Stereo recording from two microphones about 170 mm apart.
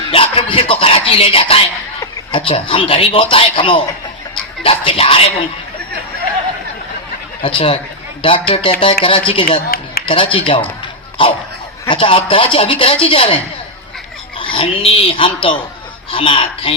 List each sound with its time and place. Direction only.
0.1 s speech: 30° left (ahead or behind)
7.4 s speech: 30° left (ahead or behind)
9.6 s speech: 60° left (ahead or behind)
10.1 s speech: 30° left (ahead or behind)